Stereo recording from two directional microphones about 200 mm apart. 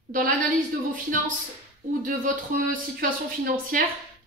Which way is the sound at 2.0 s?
45° right (ahead or behind).